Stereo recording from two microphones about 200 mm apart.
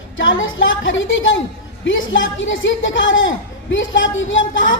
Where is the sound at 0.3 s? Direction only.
70° left (ahead or behind).